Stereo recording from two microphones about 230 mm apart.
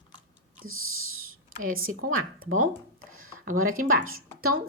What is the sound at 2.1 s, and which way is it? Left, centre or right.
Speech, right.